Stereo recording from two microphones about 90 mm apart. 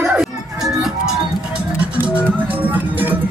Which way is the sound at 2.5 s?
20° right (ahead or behind).